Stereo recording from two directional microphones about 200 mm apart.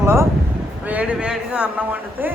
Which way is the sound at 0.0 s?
15° right (ahead or behind).